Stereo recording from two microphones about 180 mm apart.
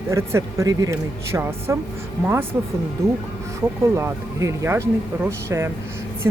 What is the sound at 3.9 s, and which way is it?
Speech, 15° right (ahead or behind).